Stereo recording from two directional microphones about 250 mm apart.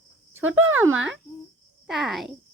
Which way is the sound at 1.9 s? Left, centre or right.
Centre.